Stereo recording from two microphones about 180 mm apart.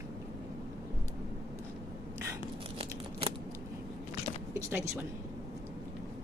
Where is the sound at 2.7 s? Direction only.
30° right (ahead or behind).